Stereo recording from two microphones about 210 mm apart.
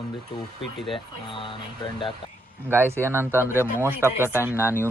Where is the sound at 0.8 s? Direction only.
Centre (ahead or behind).